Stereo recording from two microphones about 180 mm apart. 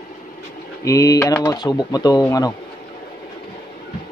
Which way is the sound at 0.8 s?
20° left (ahead or behind).